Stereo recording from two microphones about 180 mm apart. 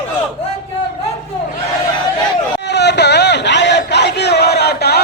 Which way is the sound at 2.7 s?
70° left (ahead or behind).